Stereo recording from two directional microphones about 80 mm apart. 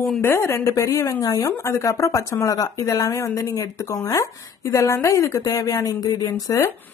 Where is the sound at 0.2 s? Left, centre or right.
Left.